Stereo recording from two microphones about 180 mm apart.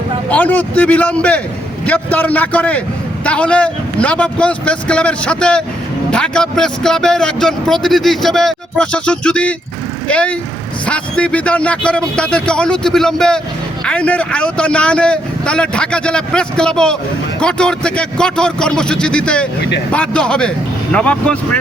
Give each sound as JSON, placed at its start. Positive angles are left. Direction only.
{"t": 0.3, "sound": "a man's voice", "side_deg": 10}